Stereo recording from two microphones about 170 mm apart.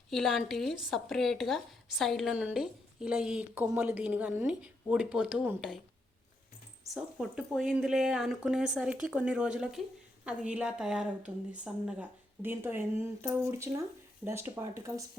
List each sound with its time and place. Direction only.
0.1 s speech: centre (ahead or behind)
6.8 s a woman's voice: centre (ahead or behind)